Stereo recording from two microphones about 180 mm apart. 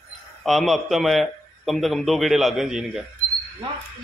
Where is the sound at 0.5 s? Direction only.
Centre (ahead or behind).